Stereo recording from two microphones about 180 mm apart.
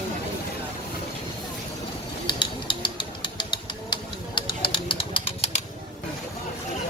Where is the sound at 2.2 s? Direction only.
25° left (ahead or behind).